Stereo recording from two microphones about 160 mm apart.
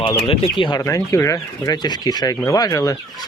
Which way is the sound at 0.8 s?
20° left (ahead or behind).